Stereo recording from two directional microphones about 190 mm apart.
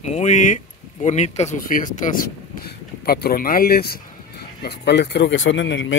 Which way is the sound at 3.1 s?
55° left (ahead or behind).